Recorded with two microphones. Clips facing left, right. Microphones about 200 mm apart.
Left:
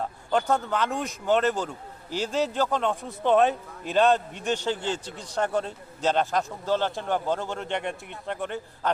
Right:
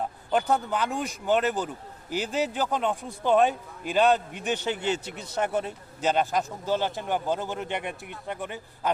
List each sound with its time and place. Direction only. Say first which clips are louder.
0.0 s a man's voice: even; 15° right (ahead or behind)
2.9 s a man's voice: left 1 dB; centre (ahead or behind)
4.4 s speech: left 1 dB; 15° right (ahead or behind)
5.2 s speech: left 2 dB; 5° right (ahead or behind)
5.5 s a man's voice: left 1 dB; 20° right (ahead or behind)